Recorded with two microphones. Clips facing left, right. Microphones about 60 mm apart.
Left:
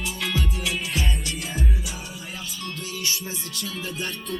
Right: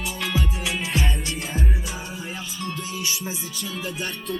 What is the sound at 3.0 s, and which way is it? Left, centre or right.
Music, centre.